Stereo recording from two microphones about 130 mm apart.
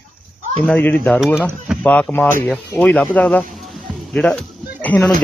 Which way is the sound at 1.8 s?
10° left (ahead or behind).